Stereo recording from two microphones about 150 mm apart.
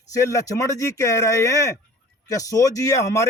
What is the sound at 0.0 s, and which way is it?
Speech, 20° left (ahead or behind).